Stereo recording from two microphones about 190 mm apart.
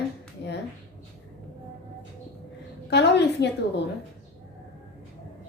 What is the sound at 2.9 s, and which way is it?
Speech, 65° left (ahead or behind).